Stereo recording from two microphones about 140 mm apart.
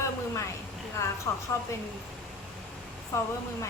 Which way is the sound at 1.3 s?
20° left (ahead or behind).